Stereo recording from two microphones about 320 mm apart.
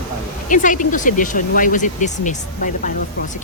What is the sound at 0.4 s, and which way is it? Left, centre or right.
Speech, left.